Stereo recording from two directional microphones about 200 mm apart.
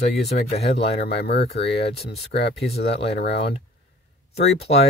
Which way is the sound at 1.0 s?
55° left (ahead or behind).